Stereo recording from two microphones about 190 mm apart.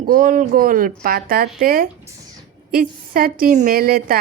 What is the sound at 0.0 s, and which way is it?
A woman's voice, 45° right (ahead or behind).